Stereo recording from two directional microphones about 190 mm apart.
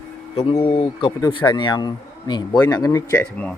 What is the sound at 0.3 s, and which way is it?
Speech, 30° left (ahead or behind).